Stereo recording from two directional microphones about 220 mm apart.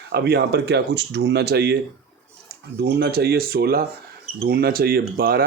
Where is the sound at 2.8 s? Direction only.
50° right (ahead or behind).